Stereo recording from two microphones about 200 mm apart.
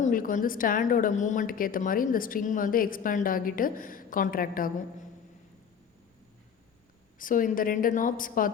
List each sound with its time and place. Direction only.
0.0 s a woman's voice: 45° left (ahead or behind)
7.2 s a woman's voice: 45° left (ahead or behind)